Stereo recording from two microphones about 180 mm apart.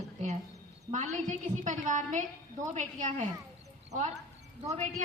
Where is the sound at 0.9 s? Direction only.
40° right (ahead or behind).